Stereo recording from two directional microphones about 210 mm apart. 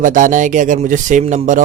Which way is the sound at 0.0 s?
40° right (ahead or behind).